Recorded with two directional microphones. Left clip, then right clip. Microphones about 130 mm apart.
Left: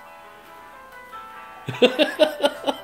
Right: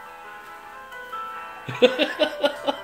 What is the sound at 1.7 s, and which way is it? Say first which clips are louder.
Laughter: left 1 dB; 45° left (ahead or behind).